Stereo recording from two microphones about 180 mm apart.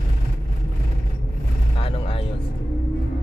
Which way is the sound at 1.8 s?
30° left (ahead or behind).